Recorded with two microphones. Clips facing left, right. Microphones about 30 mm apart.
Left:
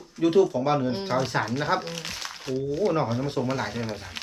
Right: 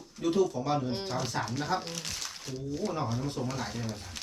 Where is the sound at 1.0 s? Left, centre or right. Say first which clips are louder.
Left 7 dB; left.